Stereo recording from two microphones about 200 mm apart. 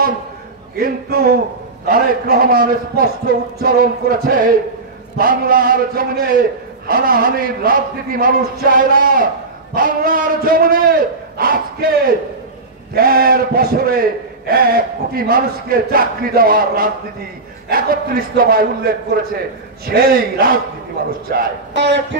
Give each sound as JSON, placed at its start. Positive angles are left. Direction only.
{"t": 0.7, "sound": "a man's voice", "side_deg": -45}
{"t": 12.9, "sound": "a man's voice", "side_deg": -45}
{"t": 21.7, "sound": "speech", "side_deg": -60}